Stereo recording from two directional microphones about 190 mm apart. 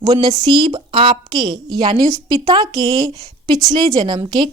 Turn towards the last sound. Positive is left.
turn(degrees=-20)  # may be behind; listen again after turning